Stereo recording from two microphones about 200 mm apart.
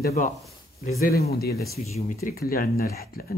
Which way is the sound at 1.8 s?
30° left (ahead or behind).